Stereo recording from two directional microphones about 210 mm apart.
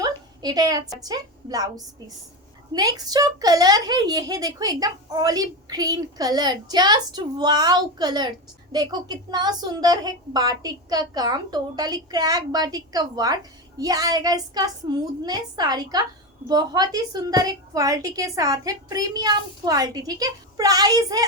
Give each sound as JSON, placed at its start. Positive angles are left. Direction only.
{"t": 0.0, "sound": "a woman's voice", "side_deg": -20}